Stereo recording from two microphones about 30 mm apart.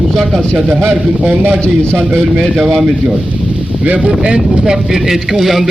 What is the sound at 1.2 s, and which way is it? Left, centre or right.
Speech, right.